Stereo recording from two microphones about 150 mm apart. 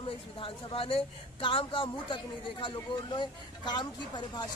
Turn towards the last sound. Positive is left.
turn(degrees=30)  # may be behind; listen again after turning